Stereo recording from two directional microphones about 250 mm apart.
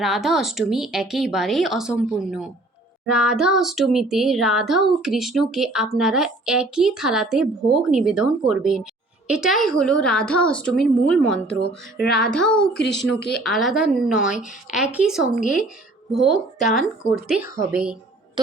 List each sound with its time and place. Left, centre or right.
0.0 s a woman's voice: centre
12.7 s speech: left
13.3 s a woman's voice: centre